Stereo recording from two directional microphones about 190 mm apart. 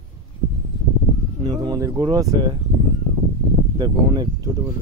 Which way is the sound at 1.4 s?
20° right (ahead or behind).